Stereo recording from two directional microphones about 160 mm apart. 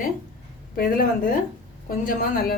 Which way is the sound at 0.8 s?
65° left (ahead or behind).